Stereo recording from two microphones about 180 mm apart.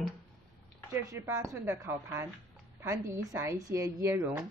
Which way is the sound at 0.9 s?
15° right (ahead or behind).